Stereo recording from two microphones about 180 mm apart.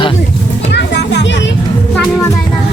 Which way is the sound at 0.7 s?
70° left (ahead or behind).